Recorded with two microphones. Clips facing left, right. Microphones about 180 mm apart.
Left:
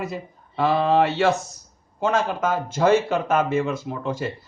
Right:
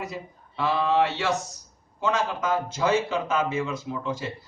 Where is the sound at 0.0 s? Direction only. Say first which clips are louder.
Left 4 dB; 55° left (ahead or behind).